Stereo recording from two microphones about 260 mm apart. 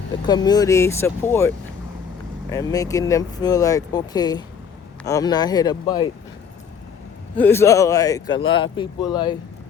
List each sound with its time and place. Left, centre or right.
0.3 s speech: centre
7.3 s speech: centre